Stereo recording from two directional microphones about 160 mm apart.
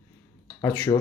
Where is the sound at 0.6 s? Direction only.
15° left (ahead or behind).